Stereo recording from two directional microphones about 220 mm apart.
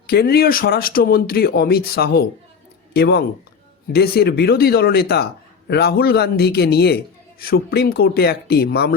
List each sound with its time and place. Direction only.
0.1 s speech: 45° left (ahead or behind)